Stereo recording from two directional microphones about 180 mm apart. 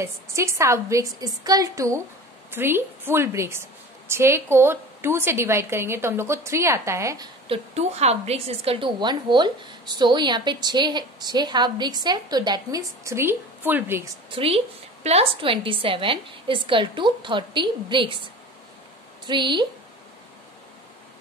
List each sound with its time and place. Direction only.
0.0 s a woman's voice: 15° right (ahead or behind)
7.4 s a woman's voice: 35° right (ahead or behind); by 14.0 s 10° right (ahead or behind)
14.3 s a woman's voice: 30° right (ahead or behind)
19.2 s a woman's voice: 25° right (ahead or behind)